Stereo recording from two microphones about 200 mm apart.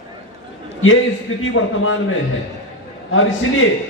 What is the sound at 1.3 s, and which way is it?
Speech, 90° left.